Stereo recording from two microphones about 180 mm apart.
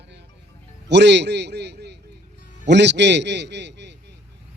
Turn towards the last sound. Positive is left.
turn(degrees=-75)  # may be behind; listen again after turning